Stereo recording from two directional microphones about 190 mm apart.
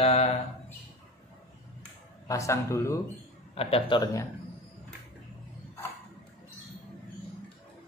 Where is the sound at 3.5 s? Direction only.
30° left (ahead or behind).